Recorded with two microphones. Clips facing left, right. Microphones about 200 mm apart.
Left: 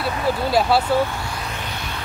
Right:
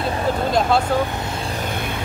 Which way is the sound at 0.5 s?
5° left (ahead or behind).